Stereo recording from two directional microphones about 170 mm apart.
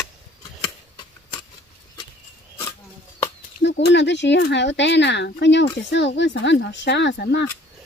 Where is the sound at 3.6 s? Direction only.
90° left.